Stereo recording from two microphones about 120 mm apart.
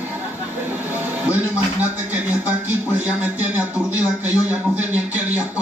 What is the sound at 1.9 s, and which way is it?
Speech, 15° right (ahead or behind).